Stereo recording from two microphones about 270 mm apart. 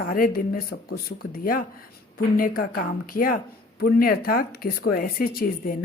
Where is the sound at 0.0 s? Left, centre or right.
Left.